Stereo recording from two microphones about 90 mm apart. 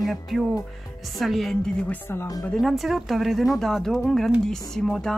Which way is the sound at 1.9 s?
25° left (ahead or behind).